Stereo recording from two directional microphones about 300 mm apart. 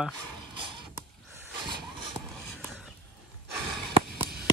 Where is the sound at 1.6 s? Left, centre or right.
Centre.